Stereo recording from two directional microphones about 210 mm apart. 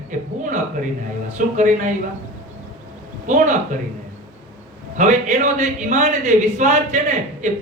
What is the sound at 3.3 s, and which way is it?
Speech, 35° right (ahead or behind).